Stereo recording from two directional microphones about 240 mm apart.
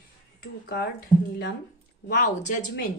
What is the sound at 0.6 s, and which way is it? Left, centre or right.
Speech, left.